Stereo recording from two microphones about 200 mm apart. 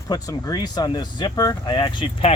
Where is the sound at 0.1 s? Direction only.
20° left (ahead or behind).